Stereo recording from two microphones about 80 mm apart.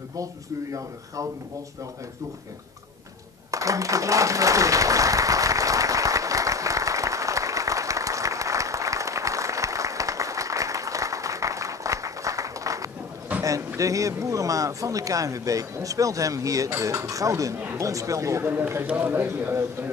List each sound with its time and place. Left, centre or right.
0.2 s speech: right
3.5 s applause: right
13.4 s a sound: right
13.7 s speech: right
18.4 s a man's voice: right